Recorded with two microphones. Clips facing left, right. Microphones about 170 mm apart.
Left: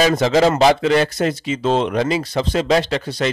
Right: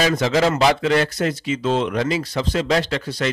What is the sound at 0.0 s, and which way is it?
Speech, 25° left (ahead or behind).